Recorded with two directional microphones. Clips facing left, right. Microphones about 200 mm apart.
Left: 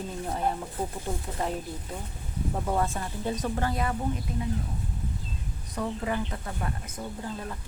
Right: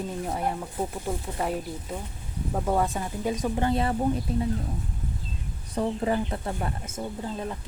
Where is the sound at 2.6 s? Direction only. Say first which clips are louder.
Right 4 dB; 10° right (ahead or behind); by 4.0 s 30° right (ahead or behind).